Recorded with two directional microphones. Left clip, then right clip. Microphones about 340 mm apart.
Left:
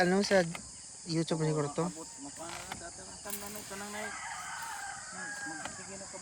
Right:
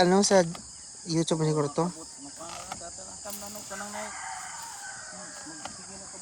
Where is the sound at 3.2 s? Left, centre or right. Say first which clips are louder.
Right 2 dB; centre.